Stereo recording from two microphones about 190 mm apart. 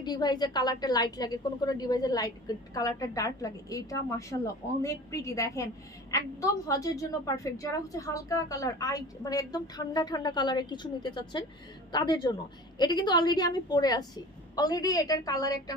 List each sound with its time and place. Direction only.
0.0 s a woman's voice: 20° left (ahead or behind)